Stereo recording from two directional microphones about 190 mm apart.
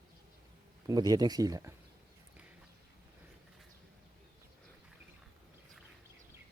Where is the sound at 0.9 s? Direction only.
20° right (ahead or behind).